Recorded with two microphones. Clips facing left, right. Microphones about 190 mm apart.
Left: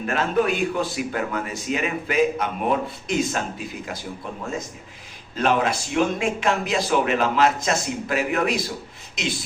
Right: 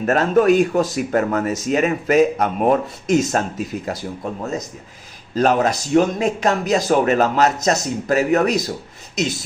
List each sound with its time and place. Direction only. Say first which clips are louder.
0.0 s a man's voice: right 6 dB; 40° right (ahead or behind)
5.3 s a man's voice: right 4 dB; 40° right (ahead or behind)